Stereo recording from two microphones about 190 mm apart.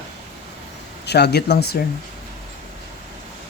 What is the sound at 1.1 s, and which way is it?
Speech, 60° left (ahead or behind).